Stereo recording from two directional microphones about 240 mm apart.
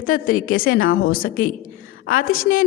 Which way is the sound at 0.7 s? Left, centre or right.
Left.